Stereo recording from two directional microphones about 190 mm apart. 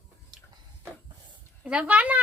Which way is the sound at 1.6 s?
5° right (ahead or behind).